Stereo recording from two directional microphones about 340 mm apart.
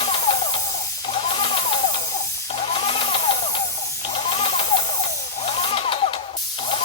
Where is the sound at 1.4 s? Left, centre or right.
Centre.